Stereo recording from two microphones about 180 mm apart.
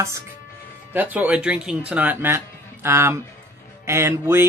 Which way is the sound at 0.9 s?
10° right (ahead or behind).